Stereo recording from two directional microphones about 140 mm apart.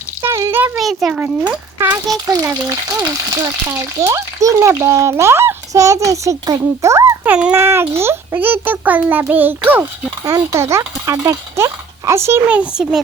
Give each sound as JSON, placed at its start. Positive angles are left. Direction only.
{"t": 0.2, "sound": "a sound", "side_deg": -20}
{"t": 0.8, "sound": "a child's voice", "side_deg": 0}
{"t": 1.2, "sound": "speech", "side_deg": -15}
{"t": 2.2, "sound": "a child's voice", "side_deg": -25}
{"t": 7.3, "sound": "a child's voice", "side_deg": -5}
{"t": 7.6, "sound": "a child's voice", "side_deg": -20}